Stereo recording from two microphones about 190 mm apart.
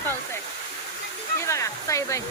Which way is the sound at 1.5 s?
15° left (ahead or behind).